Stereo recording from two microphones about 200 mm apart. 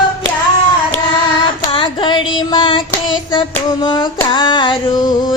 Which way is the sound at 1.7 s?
25° left (ahead or behind).